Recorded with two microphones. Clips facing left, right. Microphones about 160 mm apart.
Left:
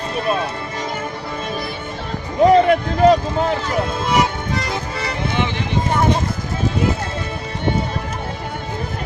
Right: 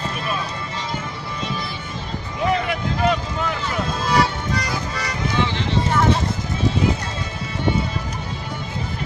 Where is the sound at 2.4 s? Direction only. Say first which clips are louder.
Left 10 dB; 40° left (ahead or behind).